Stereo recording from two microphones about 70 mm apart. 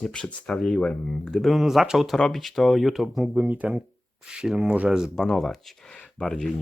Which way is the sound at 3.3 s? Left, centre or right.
Right.